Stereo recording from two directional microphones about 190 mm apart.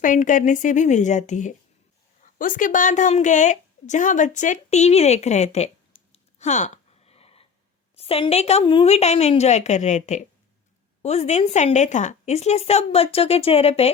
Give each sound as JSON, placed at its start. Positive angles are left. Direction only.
{"t": 0.0, "sound": "a woman's voice", "side_deg": 45}